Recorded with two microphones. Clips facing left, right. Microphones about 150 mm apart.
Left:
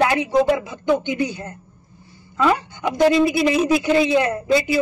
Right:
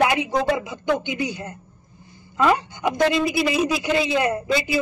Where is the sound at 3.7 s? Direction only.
55° left (ahead or behind).